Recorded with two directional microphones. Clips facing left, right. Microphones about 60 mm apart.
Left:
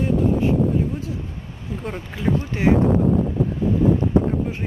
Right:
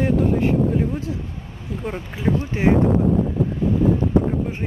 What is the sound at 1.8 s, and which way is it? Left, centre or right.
Speech, centre.